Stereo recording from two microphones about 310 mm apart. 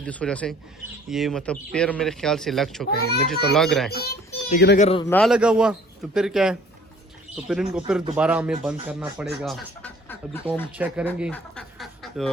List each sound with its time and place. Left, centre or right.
0.0 s speech: centre
2.9 s a child's voice: left
3.5 s speech: centre
3.9 s a child's voice: left
4.9 s a man's voice: centre
5.1 s speech: centre